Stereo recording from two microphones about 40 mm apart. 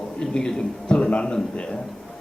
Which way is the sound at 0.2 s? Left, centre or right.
Centre.